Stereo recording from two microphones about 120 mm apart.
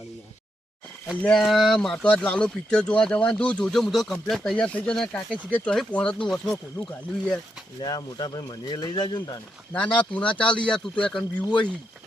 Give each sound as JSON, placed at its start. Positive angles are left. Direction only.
{"t": 1.2, "sound": "speech", "side_deg": 5}
{"t": 7.8, "sound": "speech", "side_deg": 35}
{"t": 9.7, "sound": "speech", "side_deg": 10}